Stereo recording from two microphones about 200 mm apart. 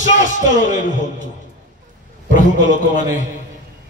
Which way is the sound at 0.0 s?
40° left (ahead or behind).